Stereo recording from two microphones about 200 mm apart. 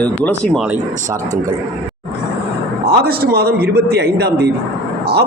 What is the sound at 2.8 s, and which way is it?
A man's voice, 50° right (ahead or behind).